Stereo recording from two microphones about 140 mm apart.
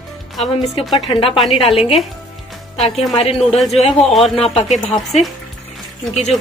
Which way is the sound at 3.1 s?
45° left (ahead or behind).